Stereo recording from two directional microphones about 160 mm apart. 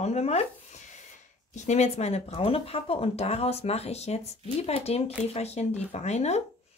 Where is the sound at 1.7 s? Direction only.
45° left (ahead or behind).